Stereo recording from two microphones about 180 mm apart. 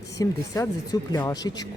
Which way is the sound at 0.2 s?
15° left (ahead or behind).